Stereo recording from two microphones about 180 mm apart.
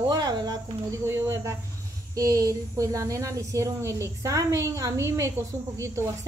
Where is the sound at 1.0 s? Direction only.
15° right (ahead or behind).